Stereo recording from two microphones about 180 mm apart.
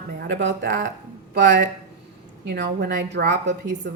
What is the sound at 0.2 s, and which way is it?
A woman's voice, 85° right.